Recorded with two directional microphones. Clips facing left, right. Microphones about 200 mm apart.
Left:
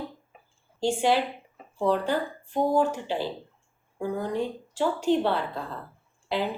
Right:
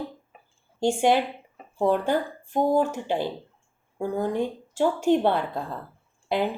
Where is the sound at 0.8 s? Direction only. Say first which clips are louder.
Right 2 dB; 50° right (ahead or behind).